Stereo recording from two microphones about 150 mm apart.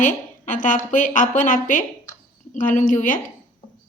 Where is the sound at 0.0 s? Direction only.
60° left (ahead or behind).